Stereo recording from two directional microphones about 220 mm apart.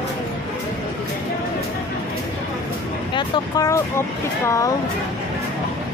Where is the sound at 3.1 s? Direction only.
20° left (ahead or behind).